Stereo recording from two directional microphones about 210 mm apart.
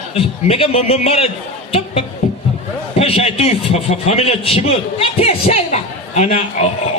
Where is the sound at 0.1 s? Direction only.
30° left (ahead or behind).